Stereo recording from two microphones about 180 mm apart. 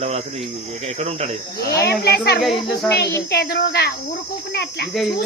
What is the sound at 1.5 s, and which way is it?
Speech, 65° left (ahead or behind).